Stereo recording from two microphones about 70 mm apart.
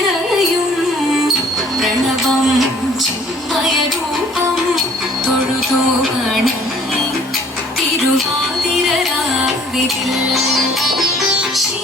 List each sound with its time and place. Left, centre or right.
1.8 s music: centre
6.0 s music: centre
10.1 s music: centre